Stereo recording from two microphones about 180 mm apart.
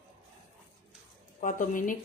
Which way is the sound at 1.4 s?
45° left (ahead or behind).